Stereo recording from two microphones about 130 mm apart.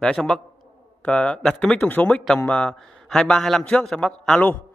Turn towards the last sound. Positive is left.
turn(degrees=10)  # may be behind; listen again after turning